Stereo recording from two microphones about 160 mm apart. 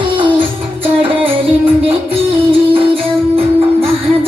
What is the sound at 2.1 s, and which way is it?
Music, 35° right (ahead or behind).